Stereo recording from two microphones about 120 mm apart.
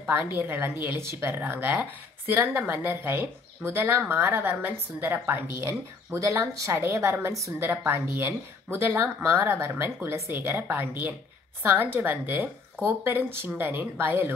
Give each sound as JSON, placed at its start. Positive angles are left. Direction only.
{"t": 0.1, "sound": "speech", "side_deg": -20}